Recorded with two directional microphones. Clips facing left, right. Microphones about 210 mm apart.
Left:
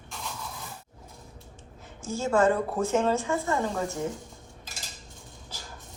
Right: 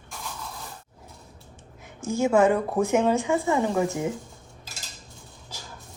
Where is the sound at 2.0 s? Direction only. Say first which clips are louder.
Right 4 dB; 15° right (ahead or behind).